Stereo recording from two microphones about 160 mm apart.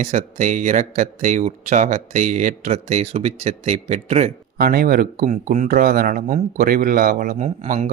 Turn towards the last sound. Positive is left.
turn(degrees=-50)  # may be behind; listen again after turning